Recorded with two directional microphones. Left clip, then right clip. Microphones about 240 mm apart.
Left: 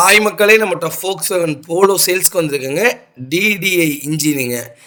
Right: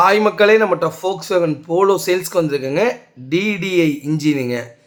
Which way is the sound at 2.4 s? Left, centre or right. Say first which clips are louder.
Even; left.